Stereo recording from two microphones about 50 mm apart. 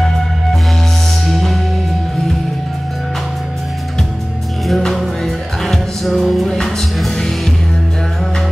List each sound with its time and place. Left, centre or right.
1.2 s music: centre
4.6 s music: centre